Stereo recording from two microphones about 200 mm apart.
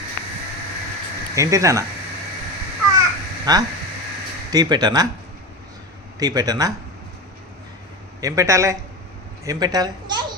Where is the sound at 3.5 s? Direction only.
20° right (ahead or behind).